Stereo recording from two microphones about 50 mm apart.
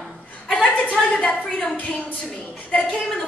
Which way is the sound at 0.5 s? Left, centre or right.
Centre.